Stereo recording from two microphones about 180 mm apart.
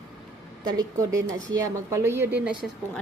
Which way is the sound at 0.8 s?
15° right (ahead or behind).